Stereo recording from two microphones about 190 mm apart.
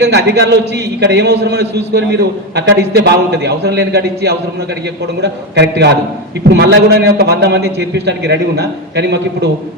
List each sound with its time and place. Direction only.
0.0 s a man's voice: 60° right (ahead or behind)